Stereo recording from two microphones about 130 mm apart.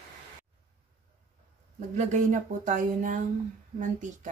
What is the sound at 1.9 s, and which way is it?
Speech, 70° right (ahead or behind).